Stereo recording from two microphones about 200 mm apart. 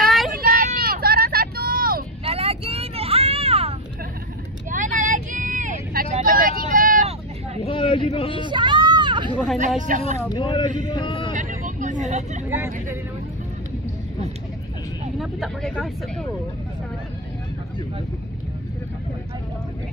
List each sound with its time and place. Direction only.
0.4 s vehicle: 45° right (ahead or behind)
2.2 s vehicle: 30° right (ahead or behind); by 7.1 s 45° right (ahead or behind)
7.6 s a sound: 25° left (ahead or behind)
8.1 s speech: 30° left (ahead or behind)
8.4 s hubbub: 25° right (ahead or behind)
9.8 s speech: 40° right (ahead or behind)
10.3 s speech: 25° left (ahead or behind)
11.3 s vehicle: 40° right (ahead or behind)
12.4 s speech: 10° right (ahead or behind)
15.1 s speech: centre (ahead or behind)